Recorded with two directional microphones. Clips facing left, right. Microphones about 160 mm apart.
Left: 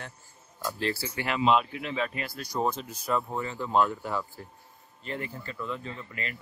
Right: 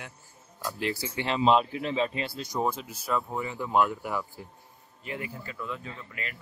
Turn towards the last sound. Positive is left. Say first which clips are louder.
# left 2 dB
turn(degrees=0)  # may be behind; listen again after turning